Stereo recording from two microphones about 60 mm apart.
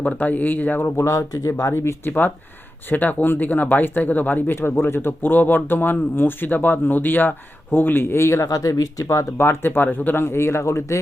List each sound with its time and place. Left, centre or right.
0.2 s speech: left
0.9 s speech: left
1.7 s speech: left
2.0 s speech: left
9.4 s speech: left